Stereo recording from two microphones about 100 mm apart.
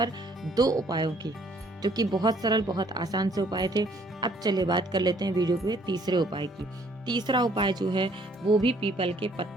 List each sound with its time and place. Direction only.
0.5 s speech: 40° right (ahead or behind)
9.0 s speech: 65° right (ahead or behind)